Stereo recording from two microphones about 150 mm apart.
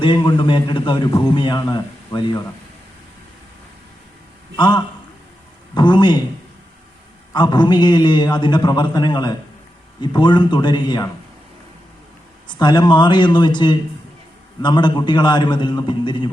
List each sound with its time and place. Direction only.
0.0 s a man's voice: 30° left (ahead or behind)
4.5 s a man's voice: 30° left (ahead or behind)
7.3 s a man's voice: 30° left (ahead or behind)
12.5 s a man's voice: 30° left (ahead or behind)